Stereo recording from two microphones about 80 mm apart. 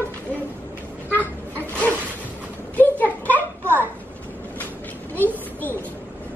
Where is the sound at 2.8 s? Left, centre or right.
Left.